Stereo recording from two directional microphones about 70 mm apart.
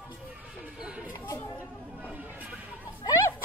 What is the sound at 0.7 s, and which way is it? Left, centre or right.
Chatter, centre.